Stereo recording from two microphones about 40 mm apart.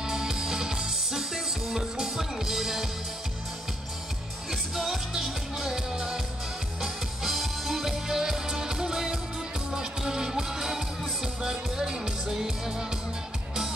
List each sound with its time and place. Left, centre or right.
0.0 s music: centre
4.5 s music: centre